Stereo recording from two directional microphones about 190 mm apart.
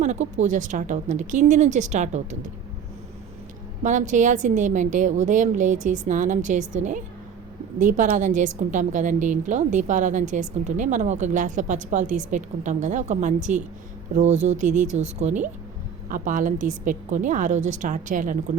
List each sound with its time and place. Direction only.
0.0 s a woman's voice: 40° right (ahead or behind)
3.8 s a woman's voice: 40° right (ahead or behind)